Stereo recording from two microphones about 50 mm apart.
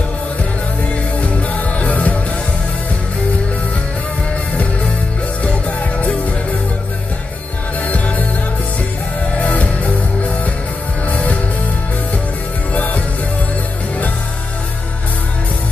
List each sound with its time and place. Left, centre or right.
1.2 s music: left
5.4 s music: left
9.4 s music: left
11.1 s music: left
12.7 s music: left